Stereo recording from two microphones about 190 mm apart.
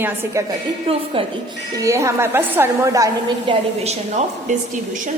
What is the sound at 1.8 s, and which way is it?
Speech, 15° right (ahead or behind).